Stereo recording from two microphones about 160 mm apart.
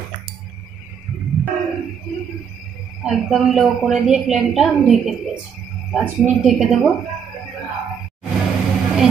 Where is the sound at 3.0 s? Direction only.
Centre (ahead or behind).